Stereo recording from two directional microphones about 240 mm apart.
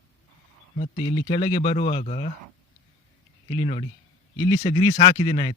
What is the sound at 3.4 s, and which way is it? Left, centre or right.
Speech, centre.